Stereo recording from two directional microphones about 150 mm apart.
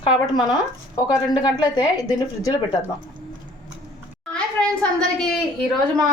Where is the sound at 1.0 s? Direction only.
30° left (ahead or behind).